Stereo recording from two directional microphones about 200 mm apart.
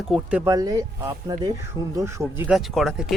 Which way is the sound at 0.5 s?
15° right (ahead or behind).